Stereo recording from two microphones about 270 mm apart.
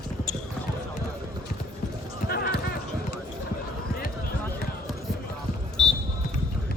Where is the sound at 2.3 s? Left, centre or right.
Left.